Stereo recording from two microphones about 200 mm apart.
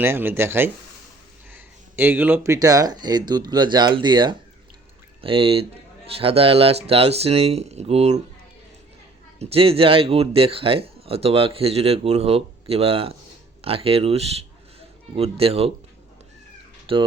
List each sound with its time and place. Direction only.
0.0 s speech: 10° right (ahead or behind); by 8.2 s 30° right (ahead or behind)
9.4 s speech: 30° right (ahead or behind)
16.9 s speech: 25° right (ahead or behind)